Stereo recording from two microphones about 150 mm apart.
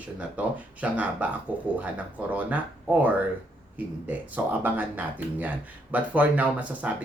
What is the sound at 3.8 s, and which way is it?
Speech, 10° right (ahead or behind).